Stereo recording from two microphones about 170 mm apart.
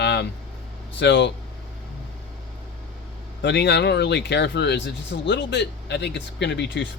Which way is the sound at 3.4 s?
90° left.